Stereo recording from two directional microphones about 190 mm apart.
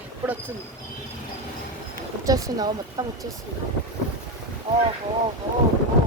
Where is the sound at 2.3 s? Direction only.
20° right (ahead or behind).